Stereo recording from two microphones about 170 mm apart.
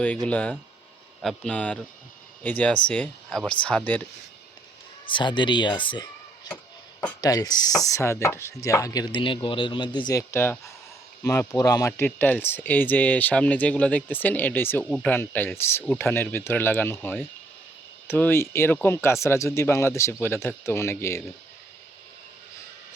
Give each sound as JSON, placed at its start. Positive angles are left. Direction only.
{"t": 0.3, "sound": "speech", "side_deg": 10}
{"t": 5.0, "sound": "a man's voice", "side_deg": 30}